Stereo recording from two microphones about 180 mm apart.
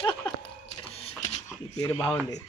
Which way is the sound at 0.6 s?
35° left (ahead or behind).